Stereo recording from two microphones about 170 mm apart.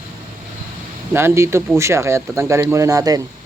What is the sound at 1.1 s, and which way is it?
Speech, 15° right (ahead or behind).